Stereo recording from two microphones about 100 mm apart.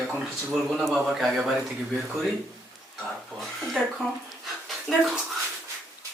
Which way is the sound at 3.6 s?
Centre (ahead or behind).